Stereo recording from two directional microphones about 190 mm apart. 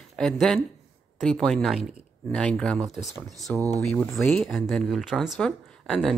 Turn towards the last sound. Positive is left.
turn(degrees=5)  # may be behind; listen again after turning